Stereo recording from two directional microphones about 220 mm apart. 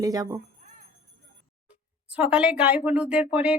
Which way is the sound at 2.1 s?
5° right (ahead or behind).